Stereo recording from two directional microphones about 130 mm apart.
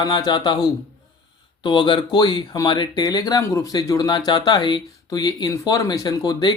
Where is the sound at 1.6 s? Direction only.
35° left (ahead or behind).